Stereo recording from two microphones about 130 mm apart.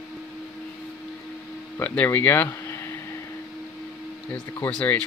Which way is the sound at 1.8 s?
15° left (ahead or behind).